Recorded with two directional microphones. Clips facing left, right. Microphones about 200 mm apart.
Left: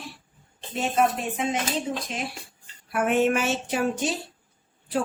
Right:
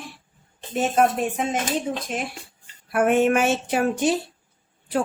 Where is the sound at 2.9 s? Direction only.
50° right (ahead or behind).